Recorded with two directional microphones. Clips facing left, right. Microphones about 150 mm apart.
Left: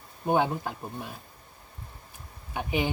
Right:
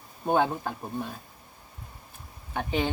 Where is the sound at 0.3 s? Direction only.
15° left (ahead or behind).